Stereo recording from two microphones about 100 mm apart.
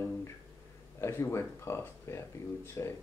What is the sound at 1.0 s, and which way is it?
Speech, 25° left (ahead or behind).